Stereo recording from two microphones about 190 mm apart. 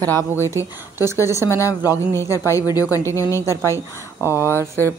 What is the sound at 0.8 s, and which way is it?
Speech, 10° right (ahead or behind).